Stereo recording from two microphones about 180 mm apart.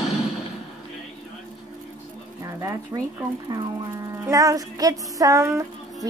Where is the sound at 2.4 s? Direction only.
15° right (ahead or behind).